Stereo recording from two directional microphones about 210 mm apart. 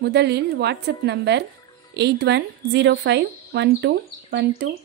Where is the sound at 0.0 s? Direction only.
50° right (ahead or behind).